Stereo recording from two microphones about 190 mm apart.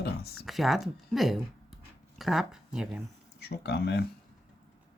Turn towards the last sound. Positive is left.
turn(degrees=60)  # may be behind; listen again after turning